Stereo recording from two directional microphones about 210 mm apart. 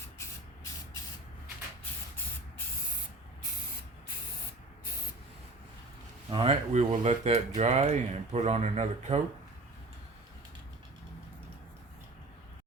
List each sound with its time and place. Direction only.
6.3 s speech: 30° right (ahead or behind)